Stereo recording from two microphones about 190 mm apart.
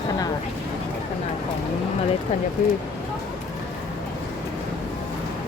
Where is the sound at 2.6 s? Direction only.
45° left (ahead or behind).